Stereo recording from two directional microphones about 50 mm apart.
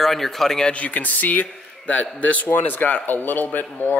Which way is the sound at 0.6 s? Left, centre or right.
Left.